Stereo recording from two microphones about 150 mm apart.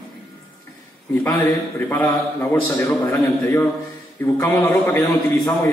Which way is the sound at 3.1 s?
15° left (ahead or behind).